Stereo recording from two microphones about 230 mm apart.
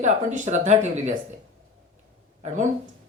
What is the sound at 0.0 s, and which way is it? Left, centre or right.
Speech, right.